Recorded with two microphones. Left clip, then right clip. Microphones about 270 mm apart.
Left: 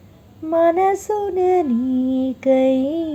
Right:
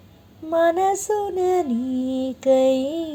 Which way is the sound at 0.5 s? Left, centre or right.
Right.